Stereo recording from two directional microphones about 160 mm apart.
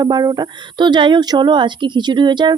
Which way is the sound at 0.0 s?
25° right (ahead or behind).